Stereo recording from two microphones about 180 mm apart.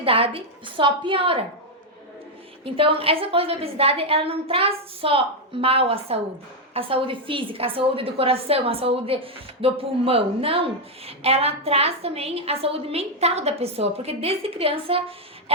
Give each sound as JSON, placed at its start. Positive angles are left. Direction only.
{"t": 0.0, "sound": "a woman's voice", "side_deg": -30}
{"t": 2.7, "sound": "a woman's voice", "side_deg": -30}